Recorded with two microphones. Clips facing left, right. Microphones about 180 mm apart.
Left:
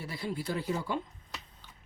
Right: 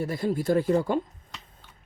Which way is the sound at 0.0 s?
45° right (ahead or behind).